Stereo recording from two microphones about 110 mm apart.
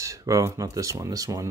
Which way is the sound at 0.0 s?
30° right (ahead or behind).